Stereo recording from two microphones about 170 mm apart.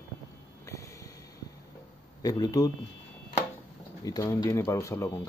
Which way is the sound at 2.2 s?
20° left (ahead or behind).